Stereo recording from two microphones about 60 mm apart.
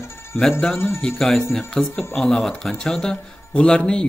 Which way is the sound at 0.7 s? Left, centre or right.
Left.